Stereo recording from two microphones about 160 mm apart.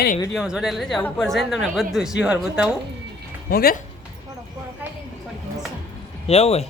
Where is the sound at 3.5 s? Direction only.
70° left (ahead or behind).